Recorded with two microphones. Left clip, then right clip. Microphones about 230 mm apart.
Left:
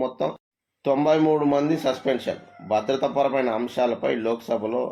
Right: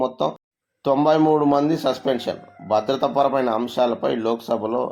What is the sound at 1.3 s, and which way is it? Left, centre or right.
Speech, right.